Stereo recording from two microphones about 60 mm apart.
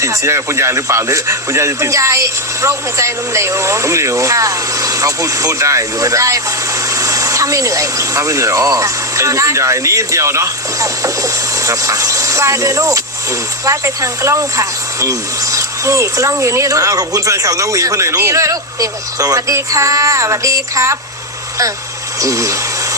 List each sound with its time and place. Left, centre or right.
0.0 s speech: right
22.2 s speech: right